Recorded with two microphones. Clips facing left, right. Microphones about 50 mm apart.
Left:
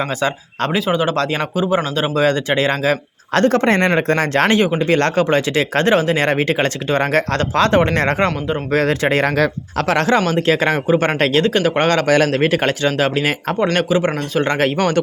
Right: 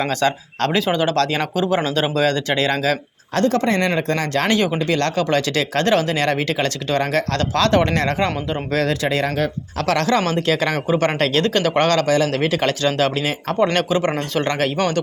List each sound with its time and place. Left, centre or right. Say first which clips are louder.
0.0 s speech: even; centre
1.0 s speech: even; centre
3.3 s speech: left 4 dB; left
4.4 s speech: left 2 dB; left
4.8 s speech: left 4 dB; left
8.0 s speech: left 3 dB; left
9.8 s speech: left 2 dB; left
11.4 s speech: left 2 dB; centre
12.0 s a man's voice: left 3 dB; left
12.3 s speech: left 3 dB; left
13.7 s speech: left 2 dB; centre
14.4 s speech: left 4 dB; left